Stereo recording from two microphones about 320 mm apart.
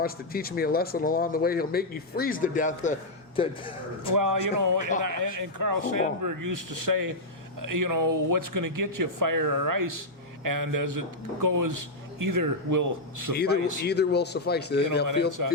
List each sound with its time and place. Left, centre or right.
0.0 s a man's voice: left
4.1 s speech: right
7.6 s speech: right
13.3 s a man's voice: left
15.4 s speech: right